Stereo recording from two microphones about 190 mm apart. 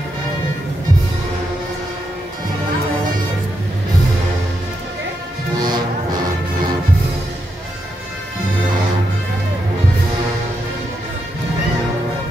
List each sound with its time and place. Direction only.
5.6 s music: 20° right (ahead or behind)